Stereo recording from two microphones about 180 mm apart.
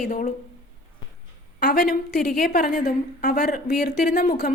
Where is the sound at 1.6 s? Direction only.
60° left (ahead or behind).